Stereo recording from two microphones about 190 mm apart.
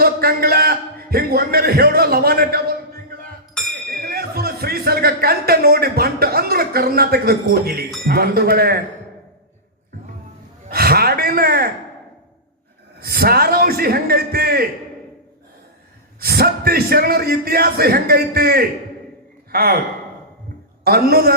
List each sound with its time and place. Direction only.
0.0 s a man's voice: 55° right (ahead or behind)
4.0 s a sound: 55° right (ahead or behind)
8.0 s speech: 55° right (ahead or behind)
10.7 s gasp: 55° right (ahead or behind)
13.0 s a man's voice: 55° right (ahead or behind)
16.2 s a man's voice: 55° right (ahead or behind)
20.8 s speech: 55° right (ahead or behind)